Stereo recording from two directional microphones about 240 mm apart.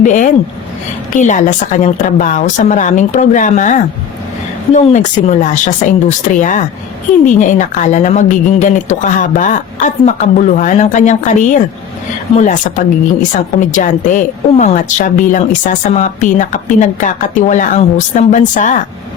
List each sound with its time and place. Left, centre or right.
0.0 s speech: left